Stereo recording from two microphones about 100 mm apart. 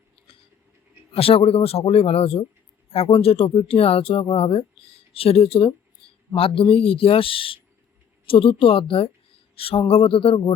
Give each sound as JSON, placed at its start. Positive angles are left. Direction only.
{"t": 1.1, "sound": "a man's voice", "side_deg": 70}